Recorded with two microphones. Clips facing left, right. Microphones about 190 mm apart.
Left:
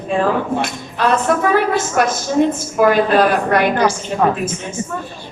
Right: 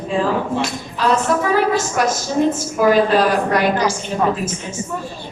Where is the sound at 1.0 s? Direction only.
55° left (ahead or behind).